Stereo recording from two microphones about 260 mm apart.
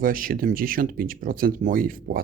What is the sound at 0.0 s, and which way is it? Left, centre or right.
Speech, right.